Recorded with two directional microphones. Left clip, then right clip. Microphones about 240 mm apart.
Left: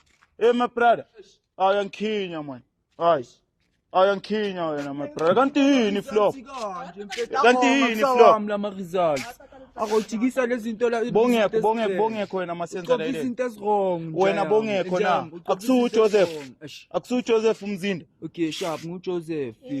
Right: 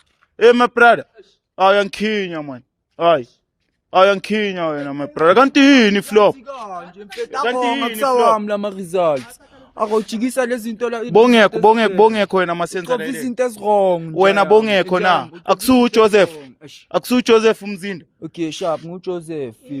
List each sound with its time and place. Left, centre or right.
0.3 s a man's voice: right
7.4 s a man's voice: left
8.4 s a man's voice: right
10.8 s speech: centre
11.1 s a man's voice: right
17.7 s speech: centre
18.2 s speech: right